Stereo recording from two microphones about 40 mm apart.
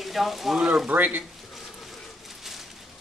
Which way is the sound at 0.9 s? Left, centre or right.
Right.